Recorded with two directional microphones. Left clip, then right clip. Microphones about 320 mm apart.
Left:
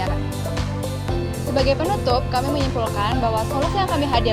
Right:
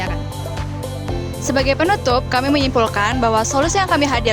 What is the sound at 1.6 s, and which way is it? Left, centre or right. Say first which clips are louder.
Speech: right 4 dB; right.